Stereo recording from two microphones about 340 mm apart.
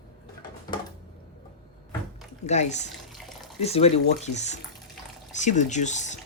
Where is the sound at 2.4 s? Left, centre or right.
Centre.